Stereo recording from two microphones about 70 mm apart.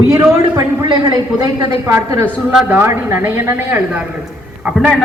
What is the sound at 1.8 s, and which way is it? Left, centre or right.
Speech, right.